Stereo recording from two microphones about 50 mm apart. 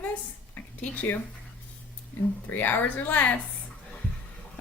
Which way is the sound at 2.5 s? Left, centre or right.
Left.